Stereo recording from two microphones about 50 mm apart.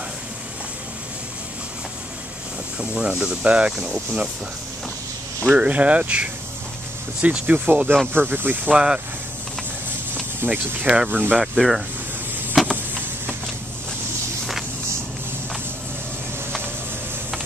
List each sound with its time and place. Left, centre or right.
2.8 s speech: right
5.5 s speech: right
8.7 s speech: centre
10.4 s speech: right
11.3 s speech: centre
12.7 s printer: right